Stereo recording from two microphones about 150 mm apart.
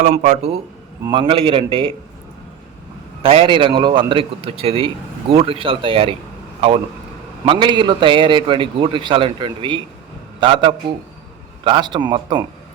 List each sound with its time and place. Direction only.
0.0 s speech: 55° right (ahead or behind)
1.0 s a man's voice: 30° right (ahead or behind)
3.2 s a man's voice: 35° right (ahead or behind)
7.4 s a man's voice: 30° right (ahead or behind)